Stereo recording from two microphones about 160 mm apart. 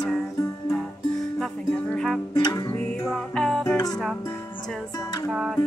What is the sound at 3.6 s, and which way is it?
Music, 20° left (ahead or behind).